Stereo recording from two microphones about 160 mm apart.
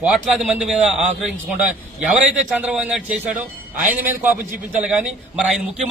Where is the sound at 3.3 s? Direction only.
55° right (ahead or behind).